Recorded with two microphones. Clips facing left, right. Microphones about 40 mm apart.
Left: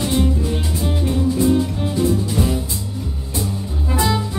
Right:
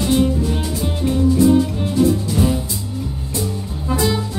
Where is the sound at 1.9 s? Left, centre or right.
Centre.